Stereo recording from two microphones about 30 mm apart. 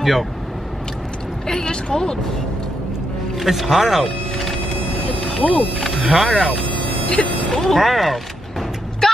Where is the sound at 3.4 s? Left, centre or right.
Centre.